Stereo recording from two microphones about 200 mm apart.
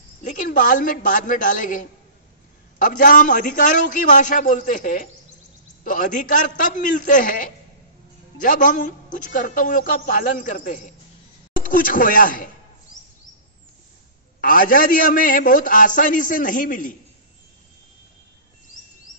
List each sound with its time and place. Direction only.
0.2 s a man's voice: 40° left (ahead or behind)
14.4 s a man's voice: 45° left (ahead or behind)